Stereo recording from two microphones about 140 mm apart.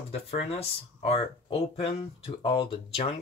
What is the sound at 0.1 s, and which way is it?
Speech, 45° left (ahead or behind).